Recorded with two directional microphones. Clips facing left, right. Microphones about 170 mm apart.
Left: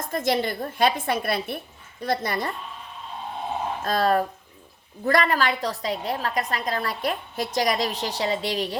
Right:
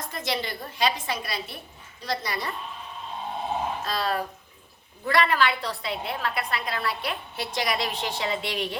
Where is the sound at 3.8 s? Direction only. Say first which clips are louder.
Left 6 dB; 50° left (ahead or behind).